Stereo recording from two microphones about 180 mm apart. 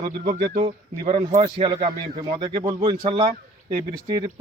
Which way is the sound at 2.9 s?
25° right (ahead or behind).